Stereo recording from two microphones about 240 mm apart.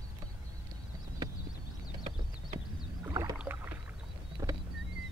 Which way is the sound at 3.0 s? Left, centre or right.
Centre.